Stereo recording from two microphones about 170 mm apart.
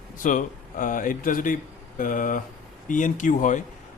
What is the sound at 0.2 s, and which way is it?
Speech, 50° left (ahead or behind).